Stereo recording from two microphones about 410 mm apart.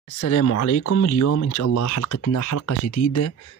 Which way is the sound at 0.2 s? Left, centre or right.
Left.